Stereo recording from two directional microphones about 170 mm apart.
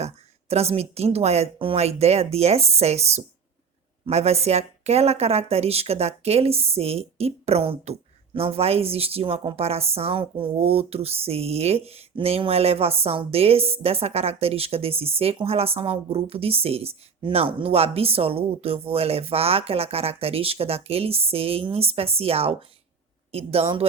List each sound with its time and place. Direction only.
0.0 s speech: 40° right (ahead or behind)